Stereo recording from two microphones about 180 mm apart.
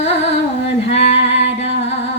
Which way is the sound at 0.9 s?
35° left (ahead or behind).